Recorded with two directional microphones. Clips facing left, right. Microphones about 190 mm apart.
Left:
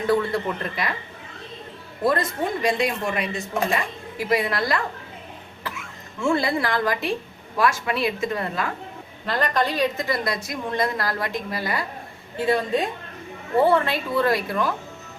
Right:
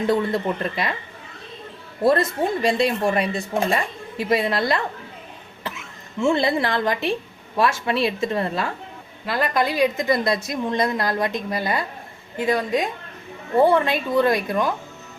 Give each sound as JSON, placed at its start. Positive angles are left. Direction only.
{"t": 0.1, "sound": "a woman's voice", "side_deg": -20}
{"t": 2.0, "sound": "a woman's voice", "side_deg": -30}
{"t": 9.2, "sound": "a woman's voice", "side_deg": -10}